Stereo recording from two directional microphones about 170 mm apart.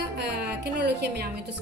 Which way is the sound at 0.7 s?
75° right (ahead or behind).